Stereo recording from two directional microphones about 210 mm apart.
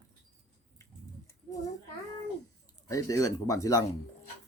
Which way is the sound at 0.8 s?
15° left (ahead or behind).